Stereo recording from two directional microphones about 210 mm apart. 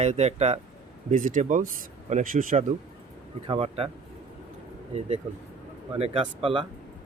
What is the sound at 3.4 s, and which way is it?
Speech, 25° right (ahead or behind).